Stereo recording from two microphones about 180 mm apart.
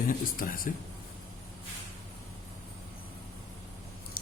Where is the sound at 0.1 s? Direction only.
50° left (ahead or behind).